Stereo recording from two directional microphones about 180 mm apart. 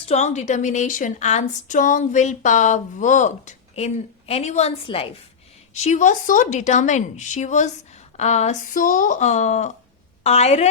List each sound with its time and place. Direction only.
0.0 s a woman's voice: 40° left (ahead or behind)